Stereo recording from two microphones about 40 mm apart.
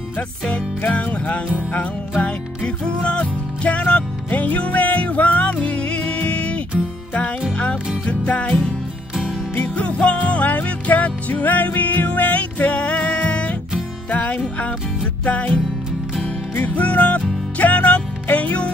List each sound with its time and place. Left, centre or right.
0.5 s music: left
3.0 s music: left
5.6 s music: left
8.1 s music: left
9.6 s music: left